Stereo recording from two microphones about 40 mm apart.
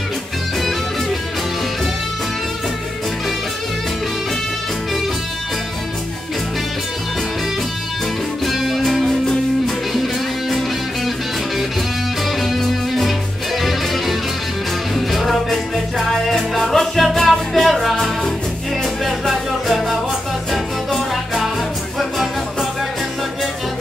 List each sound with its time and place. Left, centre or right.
8.5 s music: centre
12.4 s music: centre
19.0 s music: centre